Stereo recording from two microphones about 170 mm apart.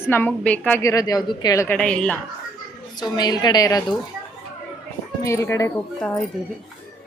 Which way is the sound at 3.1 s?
25° left (ahead or behind).